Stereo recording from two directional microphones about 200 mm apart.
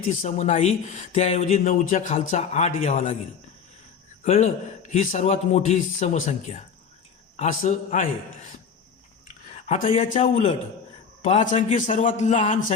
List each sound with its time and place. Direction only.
0.1 s a man's voice: 35° left (ahead or behind)
4.2 s a man's voice: 35° left (ahead or behind)
9.6 s a man's voice: 35° left (ahead or behind)